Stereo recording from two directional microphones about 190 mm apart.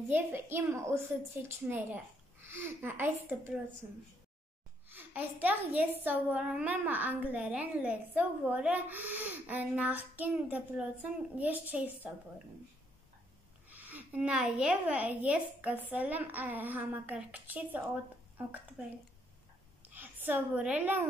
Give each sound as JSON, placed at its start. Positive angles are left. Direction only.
{"t": 0.1, "sound": "a woman's voice", "side_deg": -10}
{"t": 13.7, "sound": "a woman's voice", "side_deg": -10}
{"t": 19.9, "sound": "a woman's voice", "side_deg": -10}